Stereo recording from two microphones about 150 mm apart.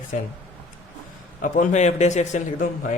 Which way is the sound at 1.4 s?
55° left (ahead or behind).